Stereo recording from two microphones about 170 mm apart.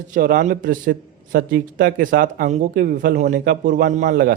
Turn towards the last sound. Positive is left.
turn(degrees=-50)  # may be behind; listen again after turning